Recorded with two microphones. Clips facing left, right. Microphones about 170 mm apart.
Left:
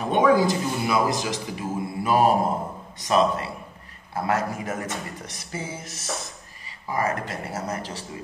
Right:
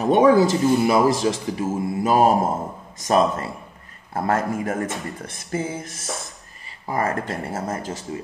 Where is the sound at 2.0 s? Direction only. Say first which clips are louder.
Right 2 dB; 45° right (ahead or behind).